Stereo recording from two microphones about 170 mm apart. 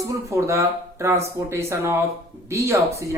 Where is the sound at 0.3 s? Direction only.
15° right (ahead or behind).